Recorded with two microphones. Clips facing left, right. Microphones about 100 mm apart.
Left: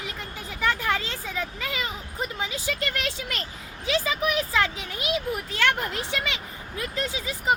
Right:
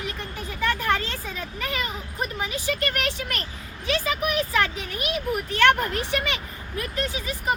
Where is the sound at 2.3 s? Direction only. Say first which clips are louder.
Right 1 dB; 15° left (ahead or behind).